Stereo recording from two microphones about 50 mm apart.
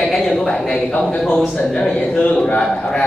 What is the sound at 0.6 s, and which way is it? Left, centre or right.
A man's voice, centre.